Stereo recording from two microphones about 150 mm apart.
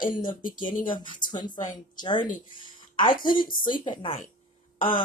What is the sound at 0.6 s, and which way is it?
Speech, 65° left (ahead or behind).